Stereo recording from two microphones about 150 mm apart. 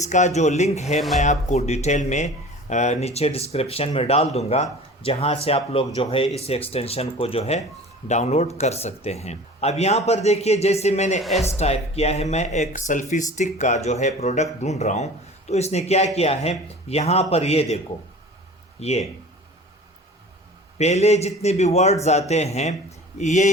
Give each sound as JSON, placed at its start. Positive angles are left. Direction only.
{"t": 0.0, "sound": "speech", "side_deg": 50}
{"t": 11.2, "sound": "speech", "side_deg": 0}
{"t": 11.5, "sound": "speech", "side_deg": 45}
{"t": 18.8, "sound": "speech", "side_deg": 45}
{"t": 20.7, "sound": "speech", "side_deg": 45}